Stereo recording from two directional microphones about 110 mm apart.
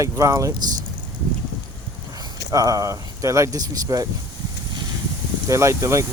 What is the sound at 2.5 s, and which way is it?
Speech, 35° right (ahead or behind).